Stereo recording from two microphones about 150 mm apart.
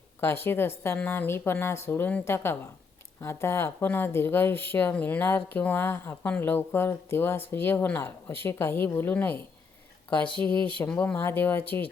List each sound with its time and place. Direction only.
0.2 s speech: 15° left (ahead or behind)
10.5 s speech: 35° right (ahead or behind)
10.8 s speech: 10° left (ahead or behind)